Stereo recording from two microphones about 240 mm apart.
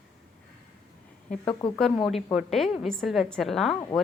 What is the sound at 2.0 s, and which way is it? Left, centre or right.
A woman's voice, centre.